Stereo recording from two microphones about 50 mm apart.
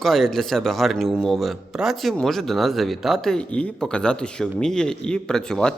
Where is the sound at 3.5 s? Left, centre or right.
Left.